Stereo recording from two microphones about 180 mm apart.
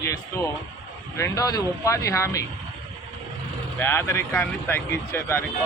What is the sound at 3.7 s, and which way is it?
A man's voice, 10° left (ahead or behind).